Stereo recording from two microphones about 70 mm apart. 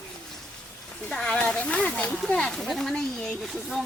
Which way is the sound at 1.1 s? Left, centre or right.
Centre.